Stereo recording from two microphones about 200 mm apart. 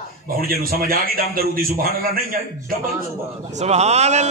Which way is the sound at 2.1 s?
45° right (ahead or behind).